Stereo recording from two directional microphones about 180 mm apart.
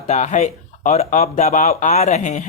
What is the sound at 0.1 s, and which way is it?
Speech, 40° left (ahead or behind).